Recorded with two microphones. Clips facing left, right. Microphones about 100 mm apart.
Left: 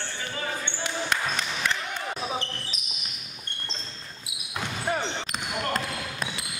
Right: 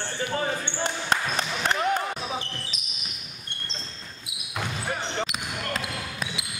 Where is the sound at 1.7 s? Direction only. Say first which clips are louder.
Right 7 dB; 50° right (ahead or behind).